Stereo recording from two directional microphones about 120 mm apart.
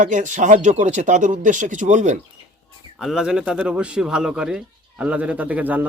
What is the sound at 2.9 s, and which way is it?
A man's voice, 5° right (ahead or behind).